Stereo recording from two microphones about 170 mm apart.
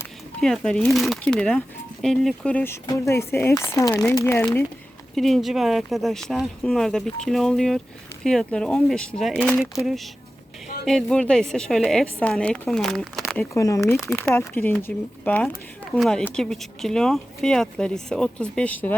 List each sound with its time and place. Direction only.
0.4 s speech: 5° left (ahead or behind)
5.1 s speech: centre (ahead or behind)
13.5 s speech: 20° left (ahead or behind)